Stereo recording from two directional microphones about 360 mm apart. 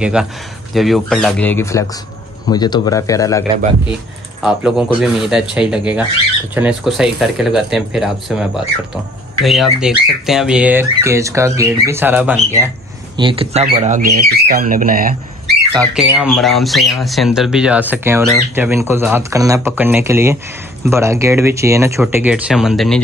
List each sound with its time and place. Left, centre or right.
0.0 s speech: centre
4.4 s speech: centre; by 15.1 s right
15.7 s speech: centre